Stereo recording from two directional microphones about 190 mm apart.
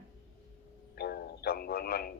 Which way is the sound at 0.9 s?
55° left (ahead or behind).